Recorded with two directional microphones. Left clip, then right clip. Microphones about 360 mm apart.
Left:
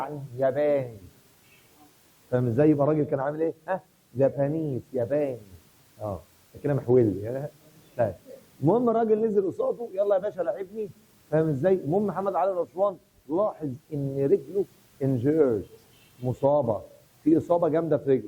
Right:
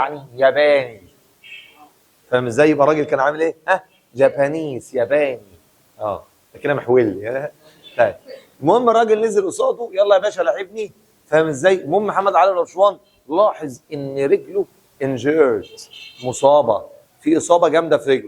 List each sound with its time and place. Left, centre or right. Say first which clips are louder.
0.0 s a man's voice: right 11 dB; centre
2.3 s a man's voice: right 8 dB; centre
8.9 s a man's voice: right 9 dB; centre
9.9 s a man's voice: right 11 dB; centre
12.7 s a man's voice: right 11 dB; centre
13.5 s a man's voice: right 9 dB; centre
16.3 s speech: right 10 dB; centre
17.6 s a man's voice: right 10 dB; centre